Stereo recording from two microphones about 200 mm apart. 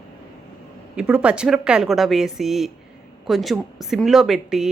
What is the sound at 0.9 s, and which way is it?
Speech, 5° right (ahead or behind).